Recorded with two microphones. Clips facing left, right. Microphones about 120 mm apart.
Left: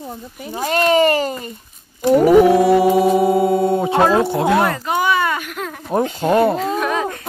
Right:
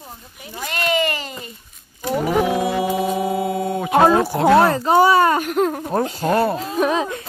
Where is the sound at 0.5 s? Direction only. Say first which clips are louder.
Left 7 dB; 40° left (ahead or behind).